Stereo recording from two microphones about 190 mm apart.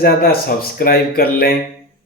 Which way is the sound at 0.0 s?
50° left (ahead or behind).